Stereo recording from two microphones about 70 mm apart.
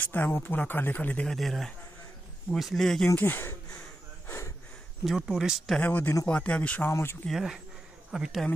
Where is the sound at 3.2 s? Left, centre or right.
Left.